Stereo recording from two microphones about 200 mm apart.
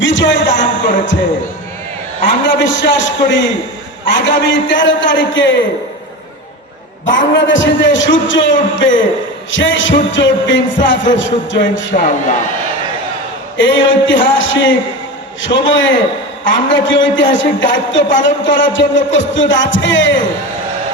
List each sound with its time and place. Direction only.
0.0 s speech: 65° left (ahead or behind)
2.4 s speech: 65° left (ahead or behind)
7.3 s speech: 65° left (ahead or behind)
11.9 s a man's voice: 40° left (ahead or behind)
13.6 s speech: 65° left (ahead or behind)